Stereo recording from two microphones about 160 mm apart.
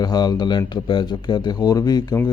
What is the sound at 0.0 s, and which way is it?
A man's voice, 25° left (ahead or behind).